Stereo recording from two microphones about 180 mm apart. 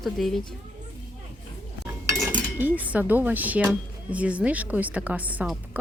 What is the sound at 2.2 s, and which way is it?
Speech, 10° right (ahead or behind).